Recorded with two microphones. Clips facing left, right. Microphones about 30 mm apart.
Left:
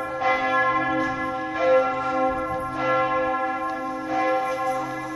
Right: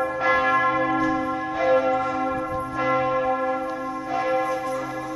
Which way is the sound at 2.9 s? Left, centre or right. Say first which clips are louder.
Even; centre.